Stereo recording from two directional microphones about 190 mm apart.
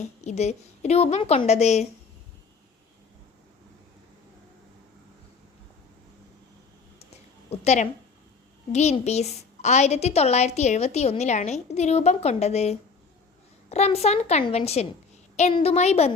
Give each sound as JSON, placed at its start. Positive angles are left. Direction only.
{"t": 0.3, "sound": "a woman's voice", "side_deg": 35}
{"t": 7.5, "sound": "a woman's voice", "side_deg": 35}